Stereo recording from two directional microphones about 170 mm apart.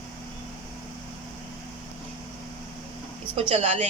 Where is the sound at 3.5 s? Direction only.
40° right (ahead or behind).